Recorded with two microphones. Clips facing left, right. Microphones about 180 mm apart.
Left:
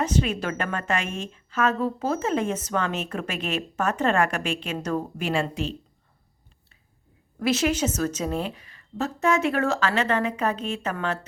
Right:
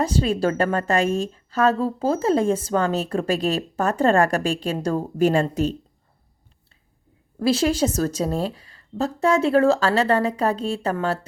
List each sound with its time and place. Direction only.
0.0 s a woman's voice: 35° right (ahead or behind)
7.3 s a woman's voice: 35° right (ahead or behind)